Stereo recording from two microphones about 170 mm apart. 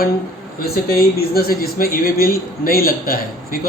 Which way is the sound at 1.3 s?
60° left (ahead or behind).